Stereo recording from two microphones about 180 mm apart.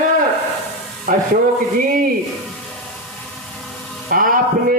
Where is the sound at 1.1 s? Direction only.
50° right (ahead or behind).